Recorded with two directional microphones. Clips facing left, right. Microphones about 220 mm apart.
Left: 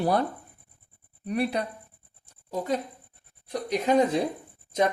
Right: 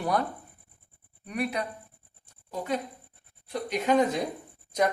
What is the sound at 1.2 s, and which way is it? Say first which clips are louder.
Speech: left 4 dB; 35° left (ahead or behind).